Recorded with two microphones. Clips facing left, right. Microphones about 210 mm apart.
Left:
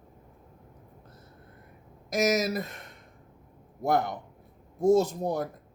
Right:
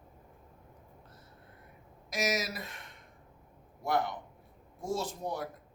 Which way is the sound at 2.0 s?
45° left (ahead or behind).